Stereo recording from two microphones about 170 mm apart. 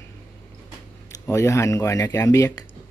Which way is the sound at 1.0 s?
15° left (ahead or behind).